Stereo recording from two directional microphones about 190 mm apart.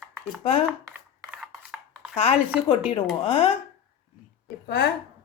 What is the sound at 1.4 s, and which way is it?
Chopping, centre (ahead or behind).